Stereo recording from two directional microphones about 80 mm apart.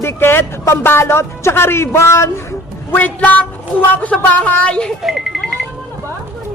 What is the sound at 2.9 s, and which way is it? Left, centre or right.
Speech, left.